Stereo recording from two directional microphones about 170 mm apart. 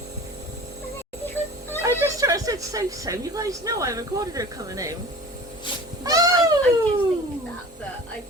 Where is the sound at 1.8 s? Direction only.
20° right (ahead or behind).